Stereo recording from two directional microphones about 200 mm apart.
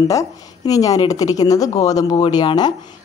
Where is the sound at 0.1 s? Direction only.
15° left (ahead or behind).